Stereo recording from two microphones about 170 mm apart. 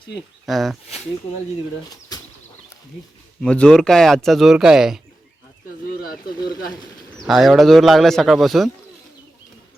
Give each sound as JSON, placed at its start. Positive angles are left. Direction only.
{"t": 0.4, "sound": "speech", "side_deg": 0}
{"t": 2.1, "sound": "a sound", "side_deg": 20}
{"t": 3.4, "sound": "speech", "side_deg": 5}
{"t": 7.2, "sound": "speech", "side_deg": 0}